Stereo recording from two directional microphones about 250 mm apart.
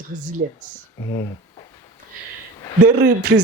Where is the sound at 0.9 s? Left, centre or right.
Centre.